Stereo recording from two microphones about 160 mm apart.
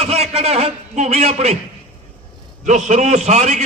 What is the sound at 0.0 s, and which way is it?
A man's voice, 40° right (ahead or behind).